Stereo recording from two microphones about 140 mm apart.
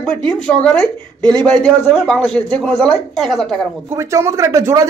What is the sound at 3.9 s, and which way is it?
Speech, 20° right (ahead or behind).